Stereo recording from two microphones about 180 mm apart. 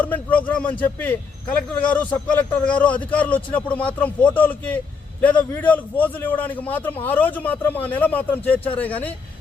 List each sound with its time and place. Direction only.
0.0 s speech: 10° left (ahead or behind)